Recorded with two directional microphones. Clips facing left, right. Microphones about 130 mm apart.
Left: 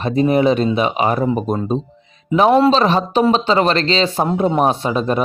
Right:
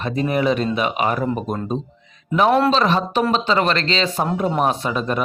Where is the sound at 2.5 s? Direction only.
Centre (ahead or behind).